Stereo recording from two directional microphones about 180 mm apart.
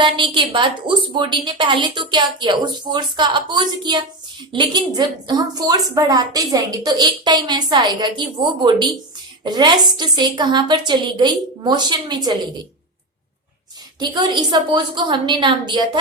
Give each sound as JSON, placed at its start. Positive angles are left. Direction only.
{"t": 0.0, "sound": "a woman's voice", "side_deg": -25}
{"t": 14.0, "sound": "a woman's voice", "side_deg": -25}